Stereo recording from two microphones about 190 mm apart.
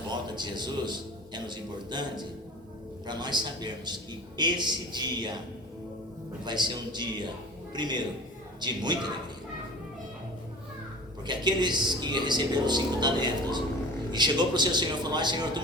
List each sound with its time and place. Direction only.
0.3 s speech: 25° right (ahead or behind)
6.4 s speech: 25° right (ahead or behind)
11.3 s speech: 25° right (ahead or behind)